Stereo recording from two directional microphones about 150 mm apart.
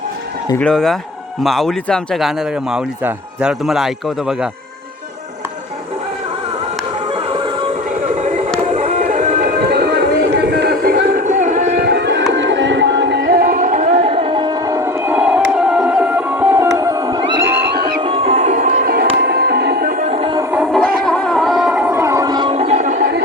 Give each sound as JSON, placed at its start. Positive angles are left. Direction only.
{"t": 0.6, "sound": "a man's voice", "side_deg": 5}
{"t": 8.7, "sound": "music", "side_deg": -55}
{"t": 11.8, "sound": "music", "side_deg": -90}
{"t": 13.3, "sound": "music", "side_deg": -80}
{"t": 14.8, "sound": "music", "side_deg": -15}
{"t": 17.6, "sound": "music", "side_deg": -90}
{"t": 18.0, "sound": "music", "side_deg": -40}
{"t": 19.1, "sound": "music", "side_deg": -90}
{"t": 20.1, "sound": "music", "side_deg": -45}
{"t": 20.5, "sound": "music", "side_deg": -5}
{"t": 20.8, "sound": "music", "side_deg": 5}
{"t": 22.5, "sound": "a sound", "side_deg": -50}